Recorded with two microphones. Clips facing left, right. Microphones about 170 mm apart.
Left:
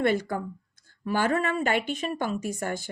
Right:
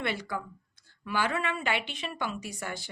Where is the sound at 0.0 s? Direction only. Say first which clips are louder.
Left 8 dB; 45° left (ahead or behind).